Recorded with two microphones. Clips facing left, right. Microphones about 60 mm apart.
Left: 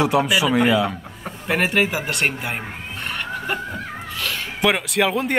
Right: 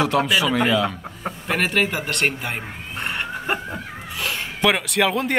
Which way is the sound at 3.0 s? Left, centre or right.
Right.